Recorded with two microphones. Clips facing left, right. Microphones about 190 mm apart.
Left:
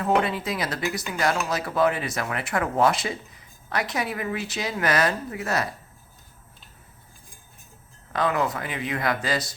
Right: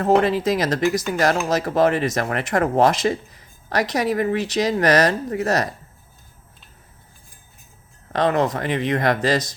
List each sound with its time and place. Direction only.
0.0 s speech: 40° right (ahead or behind)
8.3 s speech: 40° right (ahead or behind)